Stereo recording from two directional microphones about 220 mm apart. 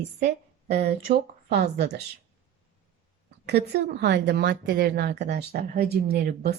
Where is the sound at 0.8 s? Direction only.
45° right (ahead or behind).